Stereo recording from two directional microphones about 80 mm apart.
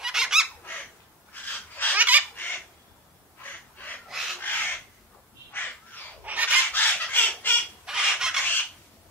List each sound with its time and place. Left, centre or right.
0.0 s bird: centre
1.3 s a sound: centre
2.0 s fowl: centre
2.3 s fowl: left
3.7 s a sound: left
4.1 s bird: centre
4.4 s crow: left
6.2 s chicken: centre
6.7 s chicken: centre
7.8 s a sound: centre